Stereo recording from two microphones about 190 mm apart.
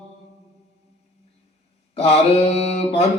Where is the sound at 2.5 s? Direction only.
35° left (ahead or behind).